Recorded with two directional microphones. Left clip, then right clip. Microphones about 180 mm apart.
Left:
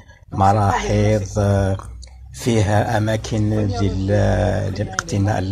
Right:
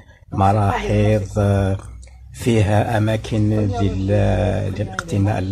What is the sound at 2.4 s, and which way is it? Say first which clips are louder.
Speech: right 1 dB; 60° right (ahead or behind).